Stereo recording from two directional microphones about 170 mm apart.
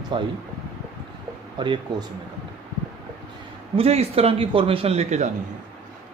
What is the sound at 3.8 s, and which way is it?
A man's voice, 35° right (ahead or behind).